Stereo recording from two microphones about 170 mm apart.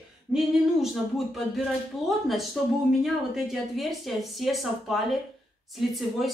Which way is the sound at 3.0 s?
Centre (ahead or behind).